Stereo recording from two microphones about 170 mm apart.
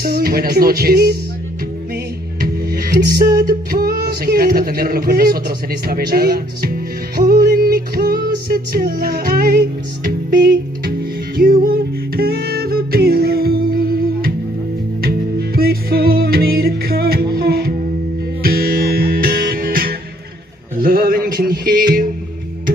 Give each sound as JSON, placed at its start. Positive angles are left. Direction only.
{"t": 0.0, "sound": "speech", "side_deg": -65}
{"t": 2.4, "sound": "music", "side_deg": -65}
{"t": 20.7, "sound": "a sound", "side_deg": -60}